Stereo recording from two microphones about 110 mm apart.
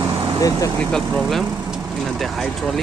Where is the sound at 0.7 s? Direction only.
Centre (ahead or behind).